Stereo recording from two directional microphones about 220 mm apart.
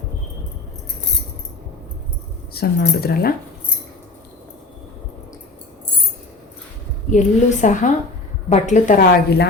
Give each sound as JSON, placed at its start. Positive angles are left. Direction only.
{"t": 2.5, "sound": "speech", "side_deg": 45}
{"t": 7.1, "sound": "a woman's voice", "side_deg": 35}